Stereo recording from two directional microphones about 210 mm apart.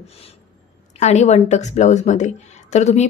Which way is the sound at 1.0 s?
35° left (ahead or behind).